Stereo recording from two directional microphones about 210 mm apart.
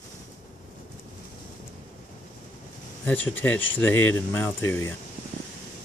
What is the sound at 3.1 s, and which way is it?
Speech, 10° left (ahead or behind).